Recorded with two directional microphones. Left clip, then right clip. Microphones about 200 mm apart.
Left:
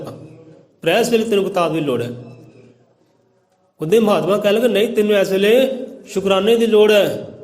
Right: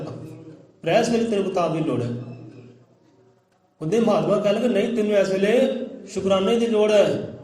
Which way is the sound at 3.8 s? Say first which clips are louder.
Left 6 dB; 50° left (ahead or behind).